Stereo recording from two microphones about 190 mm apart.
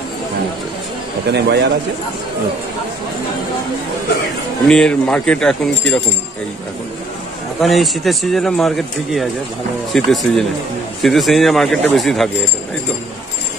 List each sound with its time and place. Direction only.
1.3 s a man's voice: 65° right (ahead or behind)
4.6 s speech: 5° left (ahead or behind)
7.6 s speech: centre (ahead or behind)